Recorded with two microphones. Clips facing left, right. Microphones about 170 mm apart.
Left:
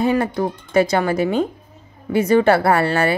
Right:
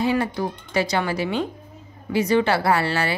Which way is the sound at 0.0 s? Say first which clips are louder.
Left 4 dB; 50° left (ahead or behind).